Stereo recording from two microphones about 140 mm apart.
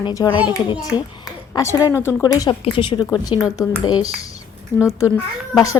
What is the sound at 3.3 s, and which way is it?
Speech, centre (ahead or behind).